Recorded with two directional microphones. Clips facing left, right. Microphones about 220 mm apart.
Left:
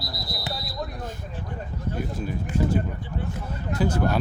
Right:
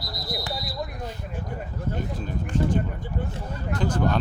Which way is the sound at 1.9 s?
10° left (ahead or behind).